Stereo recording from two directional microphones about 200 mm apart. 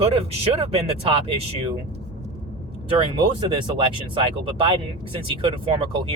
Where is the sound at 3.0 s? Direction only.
25° right (ahead or behind).